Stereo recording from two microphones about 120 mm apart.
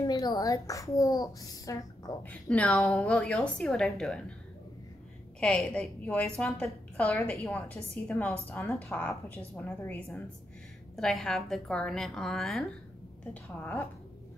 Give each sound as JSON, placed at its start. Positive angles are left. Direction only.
{"t": 0.0, "sound": "a child's voice", "side_deg": 35}
{"t": 2.2, "sound": "a woman's voice", "side_deg": 10}
{"t": 5.4, "sound": "a woman's voice", "side_deg": 10}
{"t": 8.5, "sound": "a woman's voice", "side_deg": 20}